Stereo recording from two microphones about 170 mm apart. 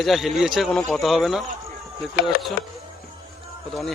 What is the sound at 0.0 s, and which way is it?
A man's voice, centre (ahead or behind).